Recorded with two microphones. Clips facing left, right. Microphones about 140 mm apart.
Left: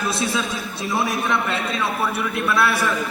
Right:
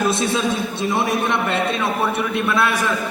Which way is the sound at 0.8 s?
20° right (ahead or behind).